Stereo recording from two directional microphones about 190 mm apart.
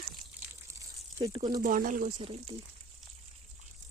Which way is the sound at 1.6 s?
45° right (ahead or behind).